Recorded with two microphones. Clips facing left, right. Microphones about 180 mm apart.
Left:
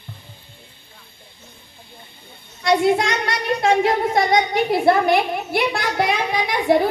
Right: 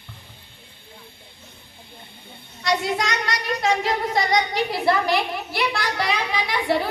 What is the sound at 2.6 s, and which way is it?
A woman's voice, 55° left (ahead or behind).